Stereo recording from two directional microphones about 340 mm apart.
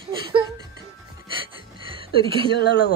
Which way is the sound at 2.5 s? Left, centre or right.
Left.